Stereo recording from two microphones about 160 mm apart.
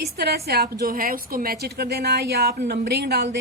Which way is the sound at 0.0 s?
75° right (ahead or behind).